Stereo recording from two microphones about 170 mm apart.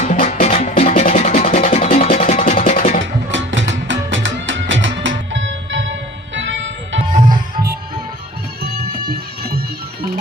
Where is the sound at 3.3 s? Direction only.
90° right.